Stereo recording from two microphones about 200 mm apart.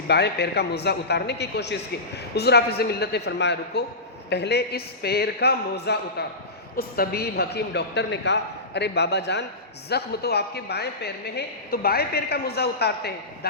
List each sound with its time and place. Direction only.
0.1 s a man's voice: 55° left (ahead or behind)